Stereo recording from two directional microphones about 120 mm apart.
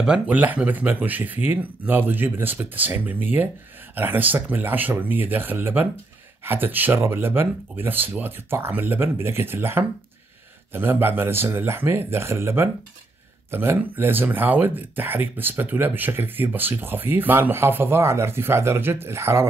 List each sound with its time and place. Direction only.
0.0 s speech: 10° right (ahead or behind)